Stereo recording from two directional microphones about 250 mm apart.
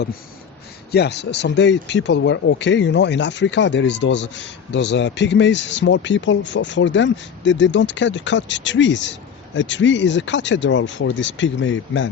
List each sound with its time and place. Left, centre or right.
0.9 s speech: left